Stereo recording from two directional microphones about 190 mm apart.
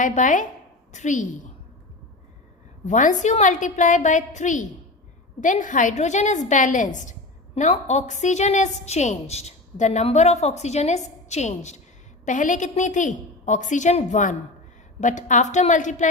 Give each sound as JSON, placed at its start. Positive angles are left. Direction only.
{"t": 0.0, "sound": "a woman's voice", "side_deg": 40}
{"t": 2.8, "sound": "a woman's voice", "side_deg": 40}